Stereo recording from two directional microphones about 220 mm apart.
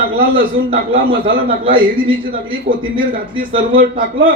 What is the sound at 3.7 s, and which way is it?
Speech, 40° right (ahead or behind).